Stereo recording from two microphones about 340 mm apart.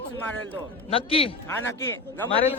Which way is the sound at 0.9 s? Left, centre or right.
Centre.